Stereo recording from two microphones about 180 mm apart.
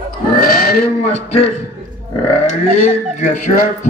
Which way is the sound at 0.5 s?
55° left (ahead or behind).